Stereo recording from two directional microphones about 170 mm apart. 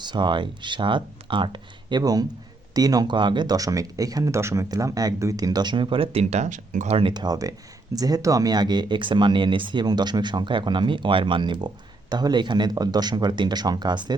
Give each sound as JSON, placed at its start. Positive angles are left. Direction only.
{"t": 0.0, "sound": "speech", "side_deg": -25}